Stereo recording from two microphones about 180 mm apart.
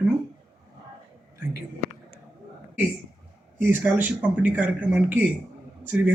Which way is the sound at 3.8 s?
10° right (ahead or behind).